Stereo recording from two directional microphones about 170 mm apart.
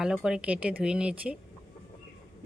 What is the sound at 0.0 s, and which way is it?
Speech, 5° right (ahead or behind).